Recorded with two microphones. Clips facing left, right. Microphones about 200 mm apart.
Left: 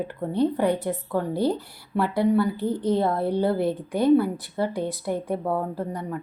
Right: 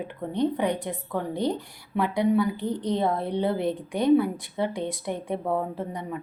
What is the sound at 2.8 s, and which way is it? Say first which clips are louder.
Speech: left 3 dB; 20° right (ahead or behind).